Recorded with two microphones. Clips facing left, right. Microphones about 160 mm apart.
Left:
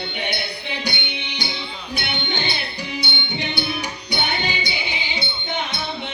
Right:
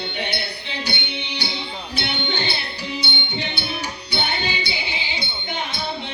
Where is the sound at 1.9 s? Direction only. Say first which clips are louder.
Right 1 dB; 15° left (ahead or behind).